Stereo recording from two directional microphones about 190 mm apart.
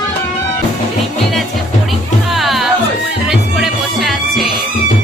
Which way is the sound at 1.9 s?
Centre (ahead or behind).